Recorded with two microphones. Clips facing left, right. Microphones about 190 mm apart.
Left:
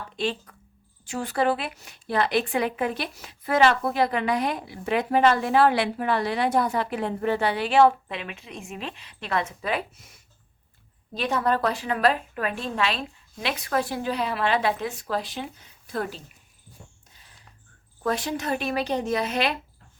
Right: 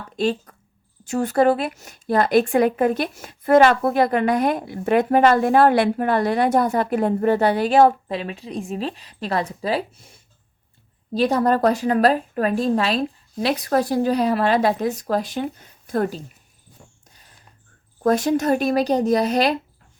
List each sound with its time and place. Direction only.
0.2 s a woman's voice: 45° right (ahead or behind)
18.0 s a woman's voice: 45° right (ahead or behind)